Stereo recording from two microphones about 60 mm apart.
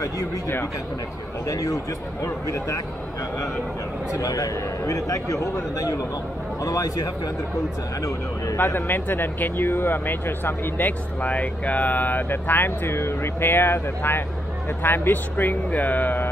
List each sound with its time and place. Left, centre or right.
1.5 s a man's voice: left
4.2 s a man's voice: left
8.5 s speech: left